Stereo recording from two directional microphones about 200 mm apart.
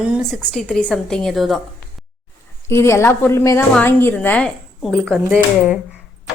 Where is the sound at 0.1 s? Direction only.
Centre (ahead or behind).